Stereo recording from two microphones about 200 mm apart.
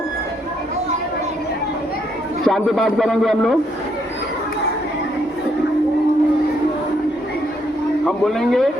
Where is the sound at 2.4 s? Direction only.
Centre (ahead or behind).